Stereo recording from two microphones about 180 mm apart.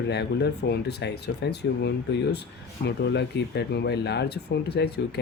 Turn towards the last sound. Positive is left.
turn(degrees=65)  # may be behind; listen again after turning